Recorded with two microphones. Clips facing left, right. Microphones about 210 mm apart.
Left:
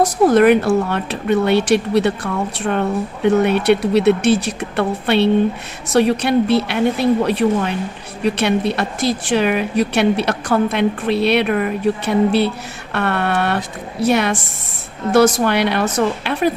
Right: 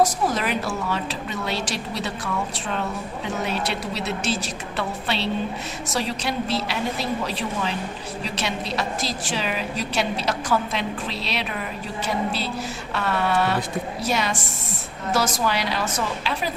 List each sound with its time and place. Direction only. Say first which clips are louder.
0.0 s a woman's voice: left 10 dB; 60° left (ahead or behind)